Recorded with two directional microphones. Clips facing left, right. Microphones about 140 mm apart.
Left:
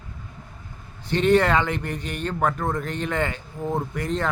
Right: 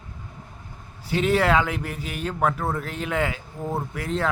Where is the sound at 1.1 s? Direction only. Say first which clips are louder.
Left 2 dB; 5° right (ahead or behind).